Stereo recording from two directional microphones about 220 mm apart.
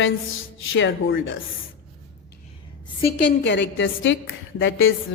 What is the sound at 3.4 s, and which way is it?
A woman's voice, 55° left (ahead or behind).